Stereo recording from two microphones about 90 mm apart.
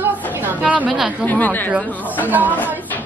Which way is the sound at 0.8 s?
5° right (ahead or behind).